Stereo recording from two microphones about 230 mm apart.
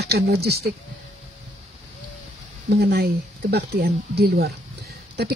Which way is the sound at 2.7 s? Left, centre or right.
Right.